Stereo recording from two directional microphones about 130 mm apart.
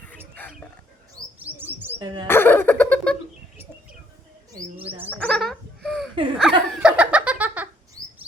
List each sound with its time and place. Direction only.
1.4 s bird: 15° right (ahead or behind)
2.0 s speech: 35° right (ahead or behind)
2.2 s a sound: 15° left (ahead or behind)
5.1 s bird: 5° left (ahead or behind)
6.3 s laughter: 5° right (ahead or behind)